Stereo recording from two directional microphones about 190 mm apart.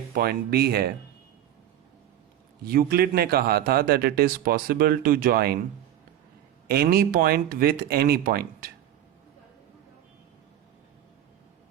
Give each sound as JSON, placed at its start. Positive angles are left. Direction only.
{"t": 0.1, "sound": "speech", "side_deg": -55}
{"t": 2.6, "sound": "a man's voice", "side_deg": -50}
{"t": 6.7, "sound": "a man's voice", "side_deg": -55}